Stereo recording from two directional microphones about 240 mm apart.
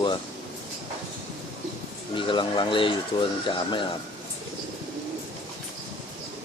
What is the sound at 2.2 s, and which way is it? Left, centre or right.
Speech, centre.